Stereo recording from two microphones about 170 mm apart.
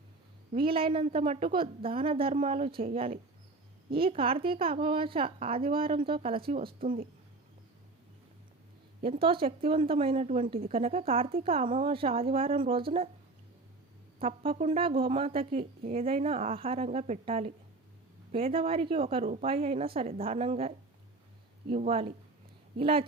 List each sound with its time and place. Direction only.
0.5 s a woman's voice: 30° right (ahead or behind)
9.0 s a woman's voice: 30° right (ahead or behind)
10.5 s a woman's voice: 35° right (ahead or behind)
14.2 s a woman's voice: 35° right (ahead or behind)
14.8 s a woman's voice: 30° right (ahead or behind)
21.7 s a woman's voice: 35° right (ahead or behind)